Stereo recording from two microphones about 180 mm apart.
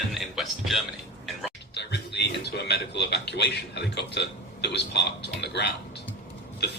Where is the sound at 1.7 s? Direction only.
70° left (ahead or behind).